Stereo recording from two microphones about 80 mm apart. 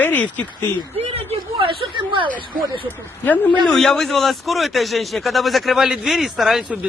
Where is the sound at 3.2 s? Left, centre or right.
Left.